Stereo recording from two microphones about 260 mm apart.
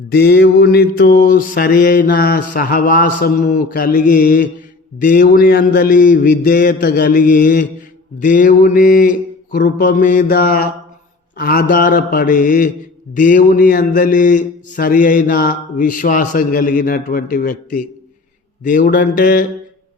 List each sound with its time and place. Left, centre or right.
0.1 s mantra: left